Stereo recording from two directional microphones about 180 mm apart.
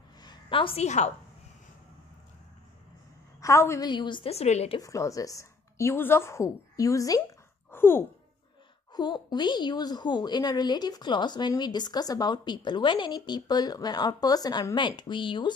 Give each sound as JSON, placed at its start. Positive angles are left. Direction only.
{"t": 0.2, "sound": "a woman's voice", "side_deg": 25}
{"t": 3.3, "sound": "a woman's voice", "side_deg": 15}
{"t": 3.9, "sound": "a woman's voice", "side_deg": 25}
{"t": 4.7, "sound": "a woman's voice", "side_deg": 15}
{"t": 7.7, "sound": "a sound", "side_deg": 10}
{"t": 8.9, "sound": "a woman's voice", "side_deg": 25}